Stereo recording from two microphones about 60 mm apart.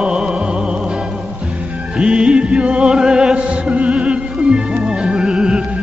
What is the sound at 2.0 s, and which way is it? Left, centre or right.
Music, centre.